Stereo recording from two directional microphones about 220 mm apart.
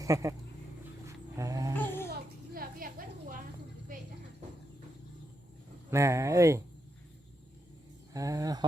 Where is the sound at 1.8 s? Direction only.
10° left (ahead or behind).